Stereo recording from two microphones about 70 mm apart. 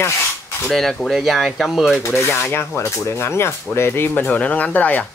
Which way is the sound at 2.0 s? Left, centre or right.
Left.